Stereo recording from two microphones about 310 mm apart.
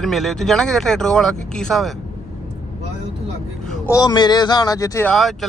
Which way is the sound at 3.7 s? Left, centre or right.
Centre.